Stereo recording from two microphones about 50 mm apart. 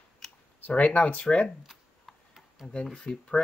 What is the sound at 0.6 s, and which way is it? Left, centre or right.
Speech, left.